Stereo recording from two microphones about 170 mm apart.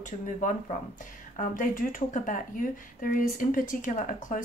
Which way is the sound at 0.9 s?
50° left (ahead or behind).